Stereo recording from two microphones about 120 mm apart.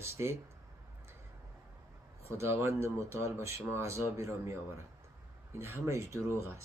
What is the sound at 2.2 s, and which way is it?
Speech, 25° right (ahead or behind).